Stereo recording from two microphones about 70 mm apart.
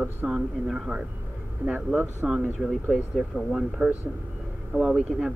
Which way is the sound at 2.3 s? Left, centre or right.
Centre.